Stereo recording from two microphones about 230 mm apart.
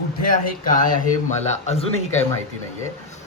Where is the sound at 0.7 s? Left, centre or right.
Left.